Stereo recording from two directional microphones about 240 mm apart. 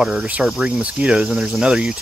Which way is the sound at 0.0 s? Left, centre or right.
Centre.